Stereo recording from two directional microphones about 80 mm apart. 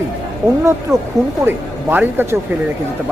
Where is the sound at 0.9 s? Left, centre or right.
Right.